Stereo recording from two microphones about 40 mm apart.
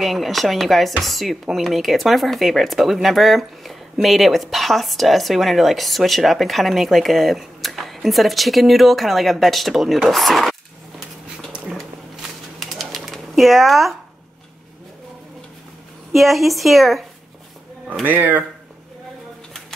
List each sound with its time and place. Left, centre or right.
0.0 s speech: centre
12.2 s bird: centre
16.1 s speech: centre
18.0 s speech: right